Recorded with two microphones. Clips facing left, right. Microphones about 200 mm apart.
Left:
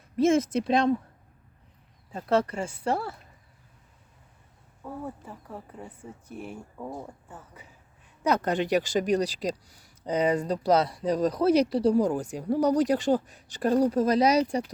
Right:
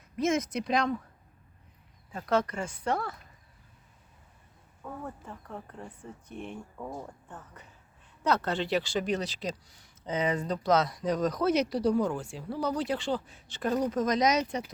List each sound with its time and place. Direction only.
0.2 s speech: 30° left (ahead or behind)
2.1 s speech: 30° left (ahead or behind)
4.8 s speech: 10° left (ahead or behind)
8.7 s speech: 40° left (ahead or behind)